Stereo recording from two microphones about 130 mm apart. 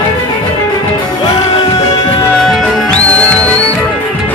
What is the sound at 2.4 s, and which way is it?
Music, centre (ahead or behind).